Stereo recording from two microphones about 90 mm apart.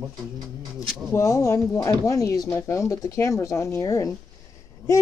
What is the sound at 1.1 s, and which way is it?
Speech, 35° left (ahead or behind).